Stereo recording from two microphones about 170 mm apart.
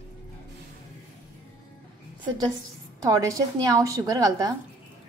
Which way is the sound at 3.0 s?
20° right (ahead or behind).